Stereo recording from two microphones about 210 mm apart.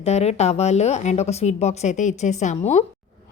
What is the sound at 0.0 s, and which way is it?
A woman's voice, 30° left (ahead or behind).